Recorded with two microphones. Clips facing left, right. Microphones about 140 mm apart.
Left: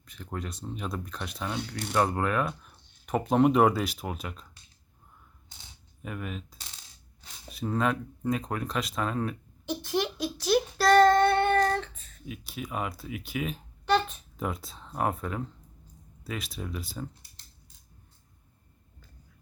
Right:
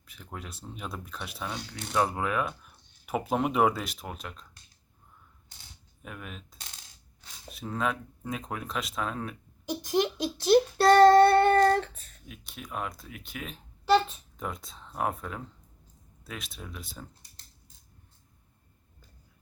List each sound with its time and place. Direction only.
0.0 s speech: 5° right (ahead or behind)
6.0 s speech: centre (ahead or behind)
9.9 s child singing: 20° right (ahead or behind); by 12.0 s 40° right (ahead or behind)
12.2 s speech: 5° left (ahead or behind)